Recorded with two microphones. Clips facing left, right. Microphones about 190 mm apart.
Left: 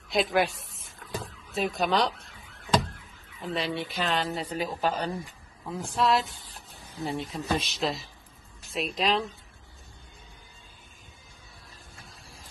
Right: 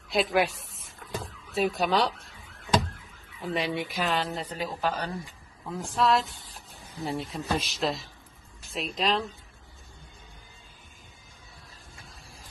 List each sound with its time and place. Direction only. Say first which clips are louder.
0.1 s a sound: even; centre (ahead or behind)
3.5 s speech: right 1 dB; 15° right (ahead or behind)
4.5 s speech: left 2 dB; 20° left (ahead or behind)
5.2 s a woman's voice: left 1 dB; centre (ahead or behind)